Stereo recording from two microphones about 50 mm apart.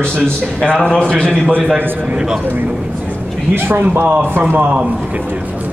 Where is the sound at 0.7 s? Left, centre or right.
Centre.